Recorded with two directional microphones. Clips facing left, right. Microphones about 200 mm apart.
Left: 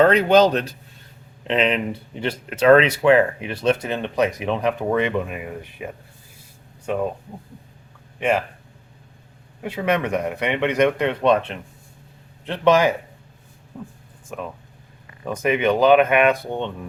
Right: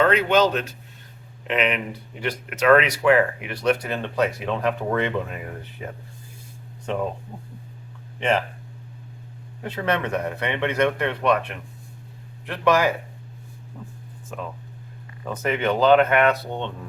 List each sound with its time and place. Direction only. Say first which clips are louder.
0.0 s a man's voice: left 4 dB; 40° left (ahead or behind); by 7.0 s 10° left (ahead or behind)
8.2 s speech: left 2 dB; 10° left (ahead or behind)
9.6 s speech: left 3 dB; 10° left (ahead or behind)
14.3 s speech: left 2 dB; 15° left (ahead or behind)